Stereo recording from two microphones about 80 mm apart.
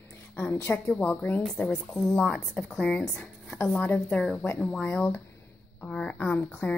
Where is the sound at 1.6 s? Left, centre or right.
Centre.